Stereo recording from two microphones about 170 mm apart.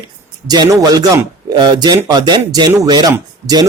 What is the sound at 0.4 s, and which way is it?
Speech, 25° right (ahead or behind).